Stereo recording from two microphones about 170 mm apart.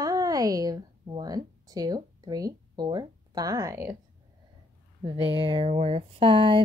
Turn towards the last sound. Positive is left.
turn(degrees=-30)  # may be behind; listen again after turning